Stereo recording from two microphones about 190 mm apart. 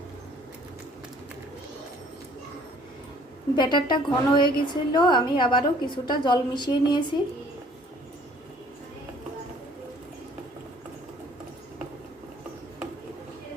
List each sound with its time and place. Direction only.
3.5 s a woman's voice: 25° left (ahead or behind)